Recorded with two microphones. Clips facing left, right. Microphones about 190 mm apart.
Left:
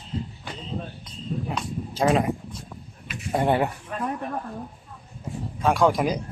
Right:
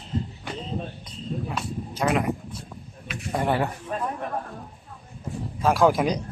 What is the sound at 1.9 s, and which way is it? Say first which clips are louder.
Speech: left 3 dB; 30° left (ahead or behind).